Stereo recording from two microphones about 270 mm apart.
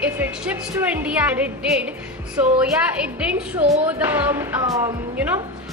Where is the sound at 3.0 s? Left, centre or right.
Centre.